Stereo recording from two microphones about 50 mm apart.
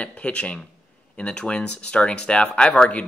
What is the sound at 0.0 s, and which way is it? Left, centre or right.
Speech, left.